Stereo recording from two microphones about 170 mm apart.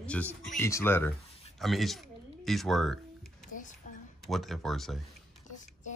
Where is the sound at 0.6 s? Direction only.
15° left (ahead or behind).